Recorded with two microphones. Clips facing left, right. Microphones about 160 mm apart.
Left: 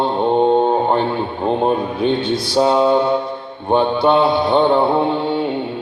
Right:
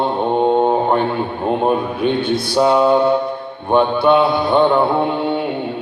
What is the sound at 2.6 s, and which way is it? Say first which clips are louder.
Mantra: right 1 dB; 25° left (ahead or behind).